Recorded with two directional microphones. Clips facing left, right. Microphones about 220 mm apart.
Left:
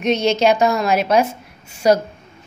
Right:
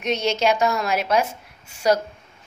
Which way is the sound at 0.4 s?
20° left (ahead or behind).